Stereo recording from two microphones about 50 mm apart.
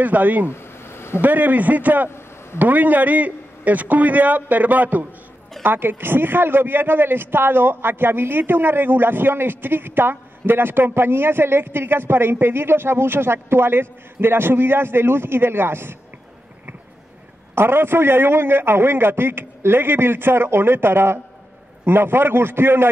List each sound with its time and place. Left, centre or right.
0.0 s a man's voice: right
0.5 s a sound: left
1.2 s a man's voice: right
2.0 s a sound: left
2.6 s a man's voice: right
5.6 s speech: right
17.6 s speech: right